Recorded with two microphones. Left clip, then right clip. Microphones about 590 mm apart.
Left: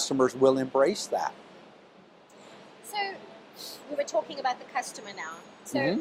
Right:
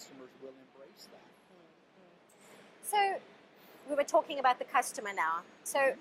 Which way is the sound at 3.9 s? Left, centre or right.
Right.